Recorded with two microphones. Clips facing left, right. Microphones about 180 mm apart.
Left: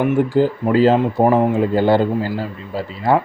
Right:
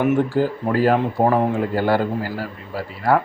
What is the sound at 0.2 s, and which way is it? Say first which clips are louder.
Speech: left 4 dB; 20° left (ahead or behind).